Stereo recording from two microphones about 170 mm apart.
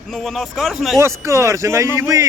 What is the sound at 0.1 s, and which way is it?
Speech, centre (ahead or behind).